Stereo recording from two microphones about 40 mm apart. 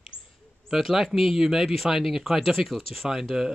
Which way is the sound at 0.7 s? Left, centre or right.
Centre.